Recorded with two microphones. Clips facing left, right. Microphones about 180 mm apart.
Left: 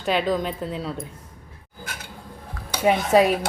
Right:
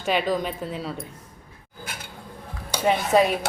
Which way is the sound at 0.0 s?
Centre (ahead or behind).